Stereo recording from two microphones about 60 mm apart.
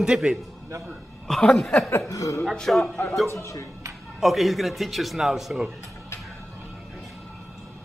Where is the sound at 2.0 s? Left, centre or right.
Left.